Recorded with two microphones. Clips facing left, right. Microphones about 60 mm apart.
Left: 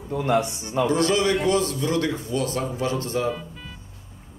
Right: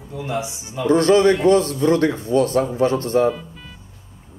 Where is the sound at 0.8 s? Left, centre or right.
Right.